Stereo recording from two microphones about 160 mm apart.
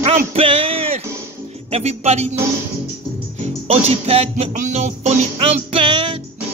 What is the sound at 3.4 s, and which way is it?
Music, 40° right (ahead or behind).